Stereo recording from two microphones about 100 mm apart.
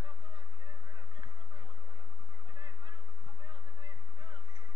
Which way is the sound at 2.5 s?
55° right (ahead or behind).